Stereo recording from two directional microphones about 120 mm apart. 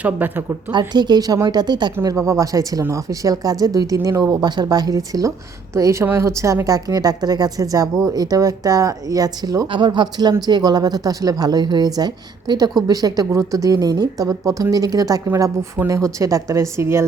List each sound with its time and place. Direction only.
0.0 s a woman's voice: 15° right (ahead or behind)
0.7 s a woman's voice: 40° right (ahead or behind)
2.0 s a woman's voice: 25° right (ahead or behind)